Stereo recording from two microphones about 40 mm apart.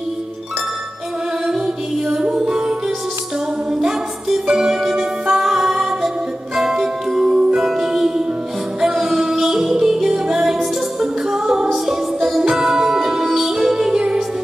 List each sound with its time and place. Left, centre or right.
2.2 s music: right
3.7 s music: centre
10.4 s music: centre